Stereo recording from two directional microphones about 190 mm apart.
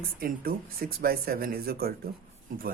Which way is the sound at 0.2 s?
50° right (ahead or behind).